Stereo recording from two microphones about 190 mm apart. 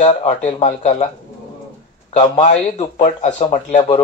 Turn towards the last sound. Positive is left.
turn(degrees=35)  # may be behind; listen again after turning